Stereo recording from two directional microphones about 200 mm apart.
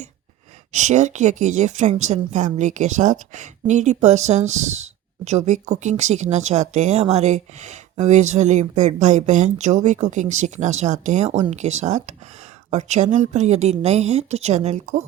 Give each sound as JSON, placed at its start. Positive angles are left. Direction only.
{"t": 0.7, "sound": "speech", "side_deg": -35}